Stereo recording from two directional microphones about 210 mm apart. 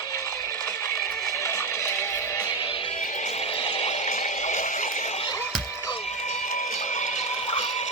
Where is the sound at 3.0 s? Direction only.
35° left (ahead or behind).